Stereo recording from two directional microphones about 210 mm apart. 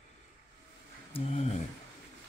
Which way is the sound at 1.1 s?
30° left (ahead or behind).